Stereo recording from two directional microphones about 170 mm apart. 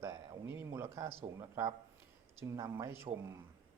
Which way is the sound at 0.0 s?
15° right (ahead or behind).